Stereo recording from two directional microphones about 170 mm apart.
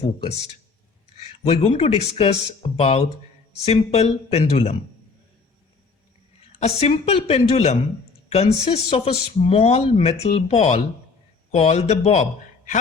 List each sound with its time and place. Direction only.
0.0 s speech: 35° left (ahead or behind)
6.6 s speech: 40° left (ahead or behind)